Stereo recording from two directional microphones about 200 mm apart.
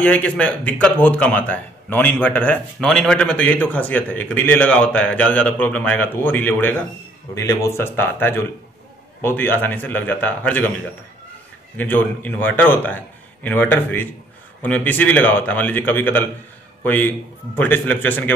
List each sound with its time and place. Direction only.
0.0 s speech: 5° left (ahead or behind)
11.7 s speech: 10° left (ahead or behind)